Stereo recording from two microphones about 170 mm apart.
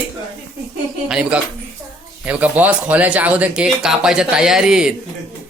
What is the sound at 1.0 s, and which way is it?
A man's voice, 5° right (ahead or behind).